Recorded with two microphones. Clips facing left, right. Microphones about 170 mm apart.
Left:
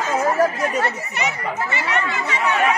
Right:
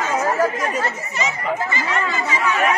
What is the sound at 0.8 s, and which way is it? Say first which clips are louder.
Speech: left 1 dB; 65° left (ahead or behind).